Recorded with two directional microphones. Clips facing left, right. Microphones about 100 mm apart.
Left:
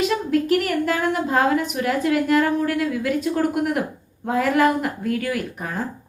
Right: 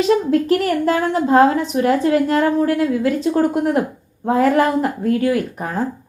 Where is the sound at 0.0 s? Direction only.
35° right (ahead or behind).